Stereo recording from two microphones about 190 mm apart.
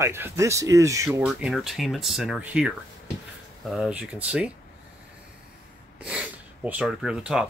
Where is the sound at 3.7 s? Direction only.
5° right (ahead or behind).